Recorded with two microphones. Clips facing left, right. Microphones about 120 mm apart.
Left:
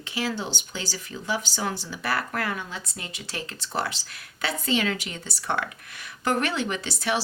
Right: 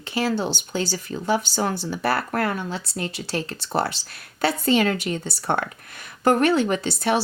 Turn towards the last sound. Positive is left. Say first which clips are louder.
# right 6 dB
turn(degrees=-50)  # may be behind; listen again after turning